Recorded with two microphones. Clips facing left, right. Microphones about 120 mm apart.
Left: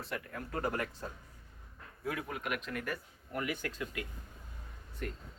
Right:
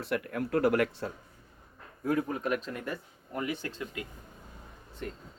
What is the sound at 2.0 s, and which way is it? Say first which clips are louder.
Speech: right 8 dB; 35° right (ahead or behind).